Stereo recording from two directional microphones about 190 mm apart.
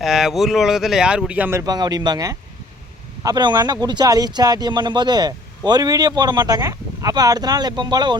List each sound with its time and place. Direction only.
0.0 s speech: centre (ahead or behind); by 8.1 s 25° right (ahead or behind)